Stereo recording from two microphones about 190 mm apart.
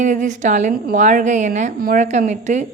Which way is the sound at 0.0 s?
40° right (ahead or behind).